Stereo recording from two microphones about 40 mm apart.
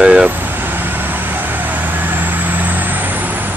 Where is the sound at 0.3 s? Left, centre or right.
Right.